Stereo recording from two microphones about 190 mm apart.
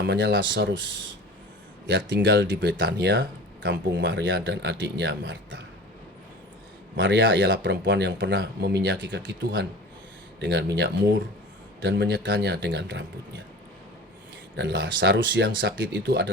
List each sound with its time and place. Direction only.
0.1 s speech: 70° right (ahead or behind)
1.9 s speech: 70° right (ahead or behind)
6.9 s speech: 70° right (ahead or behind)
14.5 s speech: 70° right (ahead or behind)